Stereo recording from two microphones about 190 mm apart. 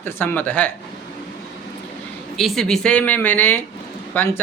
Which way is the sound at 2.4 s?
Centre (ahead or behind).